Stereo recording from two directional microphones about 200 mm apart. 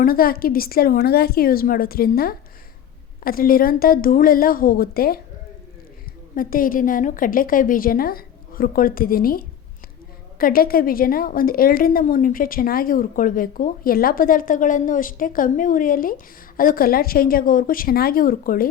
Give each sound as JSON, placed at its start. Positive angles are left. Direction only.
{"t": 0.0, "sound": "a woman's voice", "side_deg": 45}
{"t": 6.3, "sound": "a woman's voice", "side_deg": 45}